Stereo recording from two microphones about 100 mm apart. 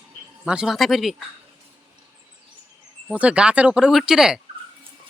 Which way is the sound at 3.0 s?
10° right (ahead or behind).